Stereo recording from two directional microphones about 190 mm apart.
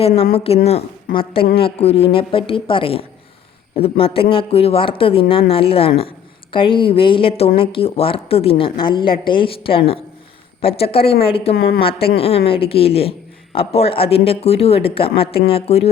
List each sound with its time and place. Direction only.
0.3 s a woman's voice: 30° left (ahead or behind)